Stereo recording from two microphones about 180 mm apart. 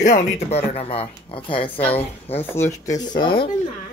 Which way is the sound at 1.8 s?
10° left (ahead or behind).